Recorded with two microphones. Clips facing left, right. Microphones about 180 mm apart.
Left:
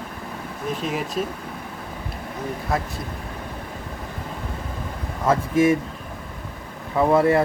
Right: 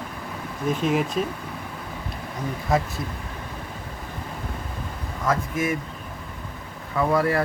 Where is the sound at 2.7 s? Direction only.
Centre (ahead or behind).